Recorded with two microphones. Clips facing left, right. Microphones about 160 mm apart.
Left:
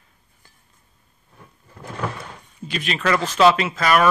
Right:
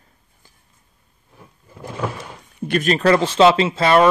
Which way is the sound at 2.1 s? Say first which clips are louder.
Right 4 dB; 55° right (ahead or behind).